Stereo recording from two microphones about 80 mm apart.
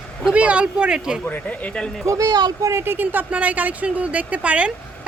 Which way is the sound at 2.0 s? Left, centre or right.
Right.